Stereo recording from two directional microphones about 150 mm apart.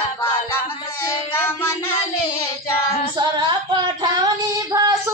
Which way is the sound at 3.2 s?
30° right (ahead or behind).